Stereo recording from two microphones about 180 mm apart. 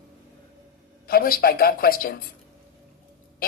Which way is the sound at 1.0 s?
55° left (ahead or behind).